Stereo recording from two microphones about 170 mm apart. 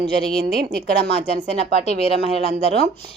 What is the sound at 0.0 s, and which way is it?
A woman's voice, 65° right (ahead or behind).